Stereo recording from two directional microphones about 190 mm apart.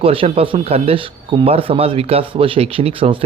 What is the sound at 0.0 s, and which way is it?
A man's voice, 30° right (ahead or behind).